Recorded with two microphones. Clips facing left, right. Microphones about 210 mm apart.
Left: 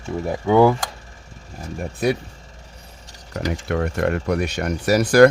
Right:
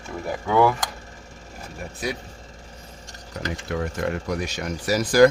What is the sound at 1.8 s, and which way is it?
Speech, 55° left (ahead or behind).